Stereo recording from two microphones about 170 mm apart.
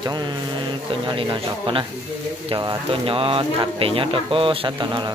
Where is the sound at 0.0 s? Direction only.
25° right (ahead or behind).